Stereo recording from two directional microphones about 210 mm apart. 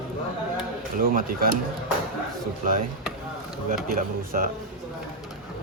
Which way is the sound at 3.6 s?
40° right (ahead or behind).